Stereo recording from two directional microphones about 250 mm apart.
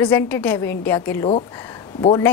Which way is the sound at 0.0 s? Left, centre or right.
Centre.